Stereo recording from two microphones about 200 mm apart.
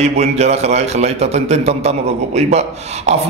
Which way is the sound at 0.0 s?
35° right (ahead or behind).